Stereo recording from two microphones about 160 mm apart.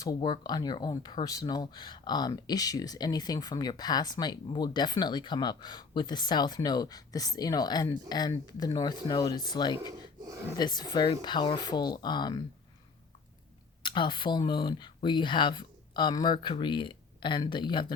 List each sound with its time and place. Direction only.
0.0 s speech: 25° left (ahead or behind)
10.2 s speech: 20° right (ahead or behind)
10.6 s speech: 25° left (ahead or behind)
13.8 s speech: 30° left (ahead or behind)